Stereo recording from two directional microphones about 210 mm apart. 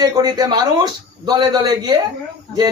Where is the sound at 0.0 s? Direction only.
20° right (ahead or behind).